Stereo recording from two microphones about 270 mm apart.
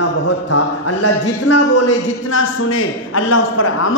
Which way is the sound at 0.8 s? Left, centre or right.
Left.